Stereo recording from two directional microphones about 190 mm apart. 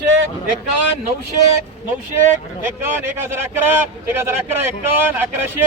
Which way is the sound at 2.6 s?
10° right (ahead or behind).